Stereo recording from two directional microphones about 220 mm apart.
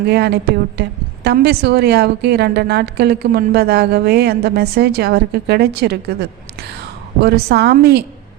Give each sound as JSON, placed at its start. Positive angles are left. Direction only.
{"t": 0.0, "sound": "a woman's voice", "side_deg": -50}